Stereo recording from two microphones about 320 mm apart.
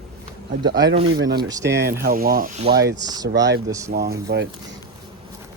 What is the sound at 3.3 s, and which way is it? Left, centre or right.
Speech, right.